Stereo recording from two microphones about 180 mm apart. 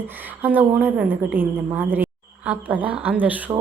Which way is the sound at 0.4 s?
10° right (ahead or behind).